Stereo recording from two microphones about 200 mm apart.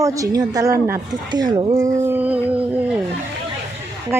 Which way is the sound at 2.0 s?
10° right (ahead or behind).